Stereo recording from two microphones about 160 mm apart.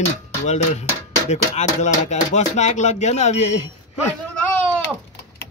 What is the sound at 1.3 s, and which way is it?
Speech, 45° left (ahead or behind).